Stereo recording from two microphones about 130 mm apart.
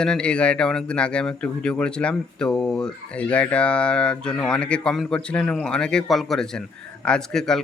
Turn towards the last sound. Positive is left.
turn(degrees=5)  # may be behind; listen again after turning